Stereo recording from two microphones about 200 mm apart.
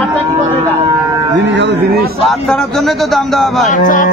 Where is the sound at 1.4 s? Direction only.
65° right (ahead or behind).